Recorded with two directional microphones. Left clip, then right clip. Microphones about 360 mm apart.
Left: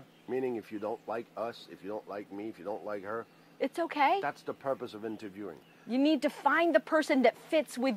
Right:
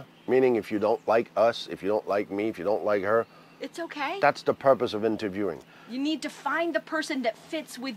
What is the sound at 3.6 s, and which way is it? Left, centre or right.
Speech, left.